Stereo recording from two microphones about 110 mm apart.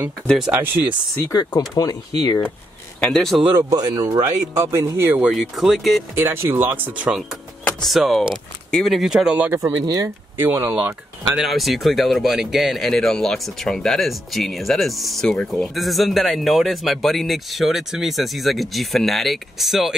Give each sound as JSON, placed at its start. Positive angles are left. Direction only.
{"t": 1.3, "sound": "speech", "side_deg": 40}
{"t": 3.0, "sound": "speech", "side_deg": 5}
{"t": 3.5, "sound": "speech", "side_deg": -35}
{"t": 4.6, "sound": "speech", "side_deg": -25}
{"t": 5.2, "sound": "speech", "side_deg": 0}
{"t": 6.1, "sound": "speech", "side_deg": -20}
{"t": 7.6, "sound": "speech", "side_deg": 0}
{"t": 9.7, "sound": "speech", "side_deg": -35}
{"t": 10.3, "sound": "speech", "side_deg": -20}
{"t": 11.3, "sound": "speech", "side_deg": 0}